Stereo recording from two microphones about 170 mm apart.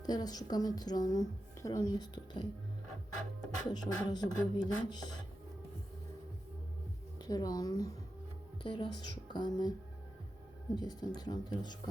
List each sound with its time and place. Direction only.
0.0 s speech: 25° left (ahead or behind)
3.7 s speech: 25° left (ahead or behind)
7.2 s speech: 25° left (ahead or behind)
10.8 s speech: 25° left (ahead or behind)